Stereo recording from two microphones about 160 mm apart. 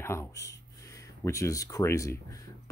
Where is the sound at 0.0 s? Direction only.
15° left (ahead or behind).